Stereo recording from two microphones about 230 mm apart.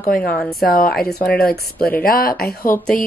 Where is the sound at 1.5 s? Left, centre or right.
Left.